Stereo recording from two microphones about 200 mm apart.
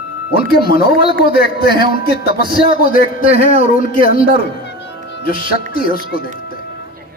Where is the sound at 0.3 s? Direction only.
50° left (ahead or behind).